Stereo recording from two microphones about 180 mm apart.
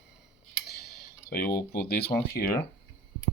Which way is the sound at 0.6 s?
60° left (ahead or behind).